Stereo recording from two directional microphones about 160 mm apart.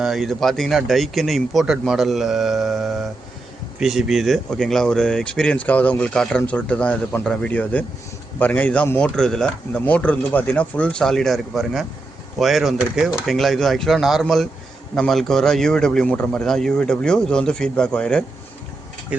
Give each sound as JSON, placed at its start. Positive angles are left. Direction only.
{"t": 0.0, "sound": "a man's voice", "side_deg": 0}